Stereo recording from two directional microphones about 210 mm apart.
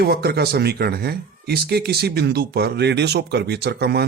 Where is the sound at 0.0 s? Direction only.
50° right (ahead or behind).